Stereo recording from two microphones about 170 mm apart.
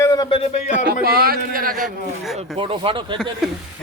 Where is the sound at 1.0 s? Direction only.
65° right (ahead or behind).